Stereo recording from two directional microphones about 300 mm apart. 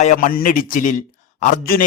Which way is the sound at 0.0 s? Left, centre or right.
Left.